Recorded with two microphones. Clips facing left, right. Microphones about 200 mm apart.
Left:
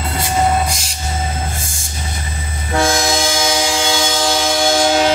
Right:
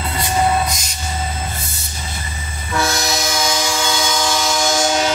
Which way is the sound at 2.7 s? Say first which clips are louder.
Left 4 dB; 50° left (ahead or behind).